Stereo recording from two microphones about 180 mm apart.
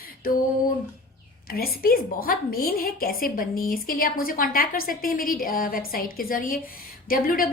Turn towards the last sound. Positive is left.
turn(degrees=50)  # may be behind; listen again after turning